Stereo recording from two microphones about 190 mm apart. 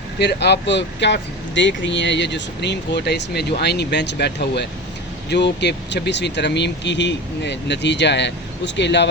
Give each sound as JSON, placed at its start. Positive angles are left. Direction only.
{"t": 0.2, "sound": "speech", "side_deg": 60}